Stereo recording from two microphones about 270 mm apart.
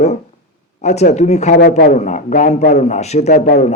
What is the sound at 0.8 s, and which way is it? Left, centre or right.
Speech, left.